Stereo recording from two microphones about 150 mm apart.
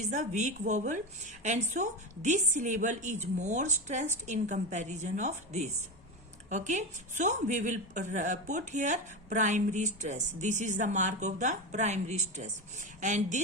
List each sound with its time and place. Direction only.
0.0 s a woman's voice: 55° right (ahead or behind)